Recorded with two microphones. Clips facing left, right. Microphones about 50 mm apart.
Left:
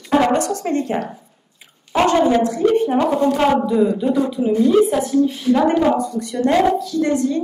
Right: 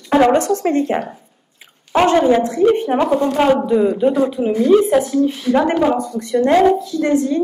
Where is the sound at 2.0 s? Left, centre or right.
Right.